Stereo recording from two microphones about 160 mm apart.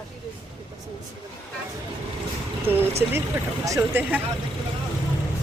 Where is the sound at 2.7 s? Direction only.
10° right (ahead or behind).